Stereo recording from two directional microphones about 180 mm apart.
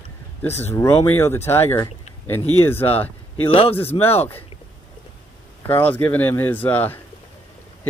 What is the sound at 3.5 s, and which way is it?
Speech, 30° left (ahead or behind).